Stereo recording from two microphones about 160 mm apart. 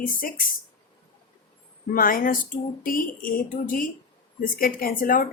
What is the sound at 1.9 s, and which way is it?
A woman's voice, 60° left (ahead or behind).